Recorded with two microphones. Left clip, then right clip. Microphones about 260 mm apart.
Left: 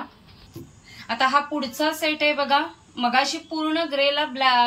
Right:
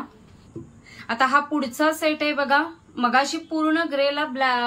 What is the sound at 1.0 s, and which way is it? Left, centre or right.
Speech, centre.